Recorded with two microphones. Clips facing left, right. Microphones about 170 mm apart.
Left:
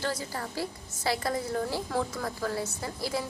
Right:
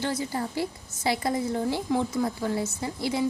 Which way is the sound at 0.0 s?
25° right (ahead or behind).